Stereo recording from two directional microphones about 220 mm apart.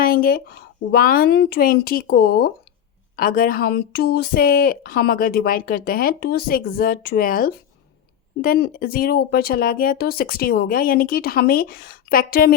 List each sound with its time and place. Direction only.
0.0 s speech: 40° left (ahead or behind)